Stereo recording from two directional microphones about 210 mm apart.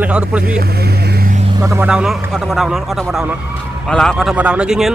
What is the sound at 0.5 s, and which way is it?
Vehicle, 50° right (ahead or behind).